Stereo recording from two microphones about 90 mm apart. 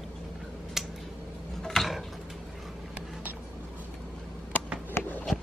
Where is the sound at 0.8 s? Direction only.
5° right (ahead or behind).